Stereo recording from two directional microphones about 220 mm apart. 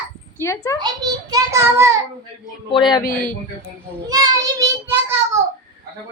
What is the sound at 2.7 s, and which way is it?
Speech, 20° left (ahead or behind).